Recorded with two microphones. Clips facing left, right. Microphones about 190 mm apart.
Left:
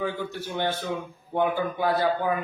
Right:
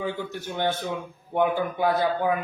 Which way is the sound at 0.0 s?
15° right (ahead or behind).